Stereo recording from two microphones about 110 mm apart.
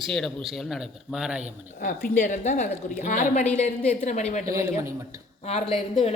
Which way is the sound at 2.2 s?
90° left.